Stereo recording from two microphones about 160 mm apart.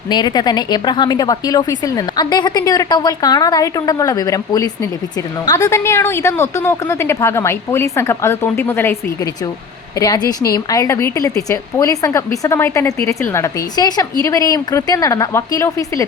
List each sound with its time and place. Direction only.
0.1 s a woman's voice: 25° left (ahead or behind)
10.0 s speech: 20° left (ahead or behind)